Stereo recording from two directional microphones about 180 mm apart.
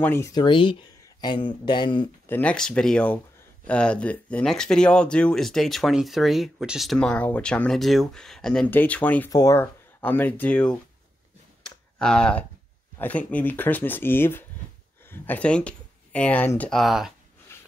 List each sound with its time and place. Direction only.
0.0 s speech: 15° left (ahead or behind)
2.2 s speech: 10° left (ahead or behind)
12.0 s speech: 5° left (ahead or behind)
17.5 s a sound: 15° left (ahead or behind)